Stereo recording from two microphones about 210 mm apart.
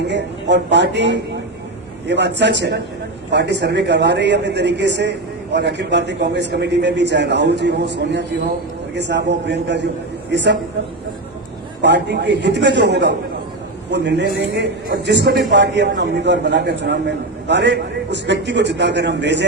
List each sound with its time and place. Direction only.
0.1 s a man's voice: 55° right (ahead or behind)
11.8 s a man's voice: 55° right (ahead or behind)